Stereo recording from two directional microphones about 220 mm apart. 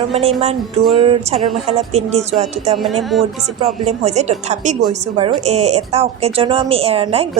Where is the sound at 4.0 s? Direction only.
30° right (ahead or behind).